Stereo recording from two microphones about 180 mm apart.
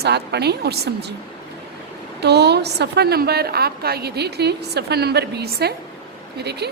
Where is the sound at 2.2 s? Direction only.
65° right (ahead or behind).